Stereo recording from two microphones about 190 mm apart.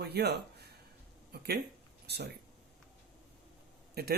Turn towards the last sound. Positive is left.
turn(degrees=-55)  # may be behind; listen again after turning